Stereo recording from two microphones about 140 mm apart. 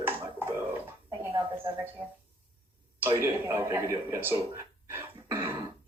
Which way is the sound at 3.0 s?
20° right (ahead or behind).